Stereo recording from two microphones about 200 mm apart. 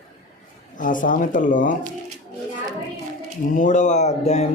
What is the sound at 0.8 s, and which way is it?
Speech, 40° left (ahead or behind).